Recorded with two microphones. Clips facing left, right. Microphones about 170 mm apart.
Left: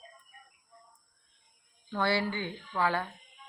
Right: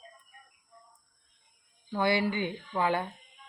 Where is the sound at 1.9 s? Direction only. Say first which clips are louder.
Right 2 dB; 15° right (ahead or behind).